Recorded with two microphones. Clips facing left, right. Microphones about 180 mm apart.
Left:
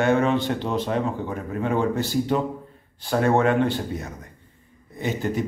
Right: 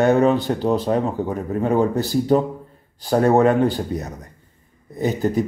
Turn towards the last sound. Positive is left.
turn(degrees=-40)  # may be behind; listen again after turning